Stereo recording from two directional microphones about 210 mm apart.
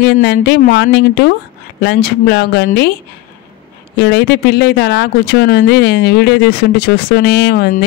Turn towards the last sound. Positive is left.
turn(degrees=50)  # may be behind; listen again after turning